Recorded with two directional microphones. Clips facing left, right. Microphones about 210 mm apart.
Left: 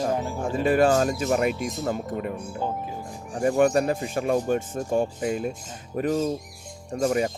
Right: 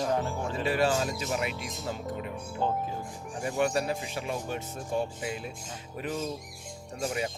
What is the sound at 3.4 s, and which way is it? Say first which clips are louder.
Speech: left 8 dB; 50° left (ahead or behind).